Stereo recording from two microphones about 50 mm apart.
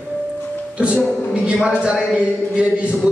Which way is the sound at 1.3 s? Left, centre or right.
Right.